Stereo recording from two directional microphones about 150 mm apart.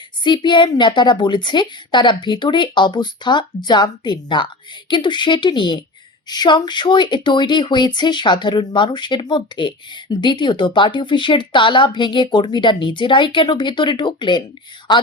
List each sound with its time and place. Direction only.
0.3 s speech: 30° left (ahead or behind)